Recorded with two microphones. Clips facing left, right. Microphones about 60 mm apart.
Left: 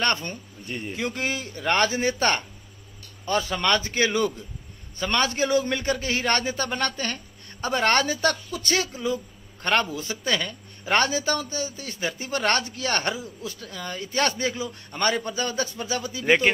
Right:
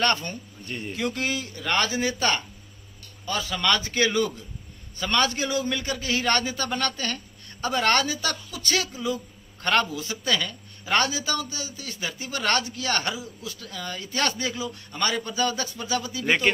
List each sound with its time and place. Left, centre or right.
0.0 s a man's voice: left
0.7 s speech: centre
0.9 s a man's voice: left